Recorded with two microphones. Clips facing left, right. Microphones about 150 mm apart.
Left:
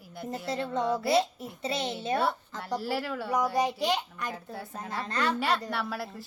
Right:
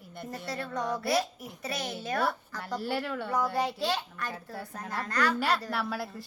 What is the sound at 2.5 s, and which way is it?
Speech, centre (ahead or behind).